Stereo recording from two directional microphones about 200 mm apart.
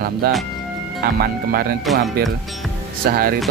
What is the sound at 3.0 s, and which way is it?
Speech, 50° right (ahead or behind).